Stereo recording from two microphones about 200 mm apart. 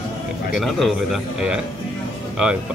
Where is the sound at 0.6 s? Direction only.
Centre (ahead or behind).